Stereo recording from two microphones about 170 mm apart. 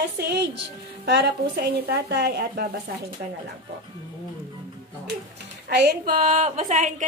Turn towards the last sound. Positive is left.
turn(degrees=-50)  # may be behind; listen again after turning